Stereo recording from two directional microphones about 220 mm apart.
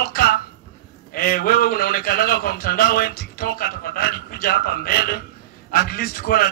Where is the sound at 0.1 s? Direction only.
40° left (ahead or behind).